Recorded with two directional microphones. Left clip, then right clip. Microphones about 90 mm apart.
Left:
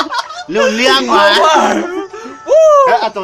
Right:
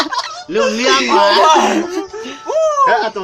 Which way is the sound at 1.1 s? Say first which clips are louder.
Left 2 dB; 30° left (ahead or behind).